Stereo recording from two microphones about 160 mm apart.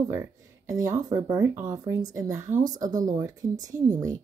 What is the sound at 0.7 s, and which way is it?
Speech, 20° right (ahead or behind).